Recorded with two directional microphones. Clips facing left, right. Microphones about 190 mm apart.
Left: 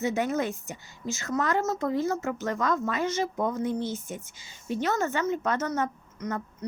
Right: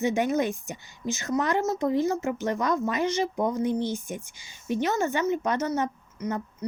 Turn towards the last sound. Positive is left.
turn(degrees=-10)  # may be behind; listen again after turning